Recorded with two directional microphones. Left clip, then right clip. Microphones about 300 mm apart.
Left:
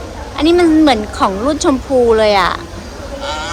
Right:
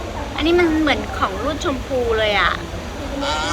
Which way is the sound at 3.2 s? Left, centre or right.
Centre.